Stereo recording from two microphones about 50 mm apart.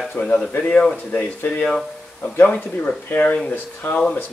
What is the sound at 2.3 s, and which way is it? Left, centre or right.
Speech, left.